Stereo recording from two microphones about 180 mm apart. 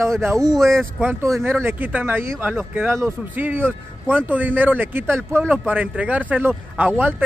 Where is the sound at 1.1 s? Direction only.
15° right (ahead or behind).